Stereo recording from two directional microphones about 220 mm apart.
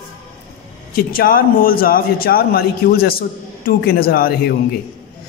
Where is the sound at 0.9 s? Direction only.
40° left (ahead or behind).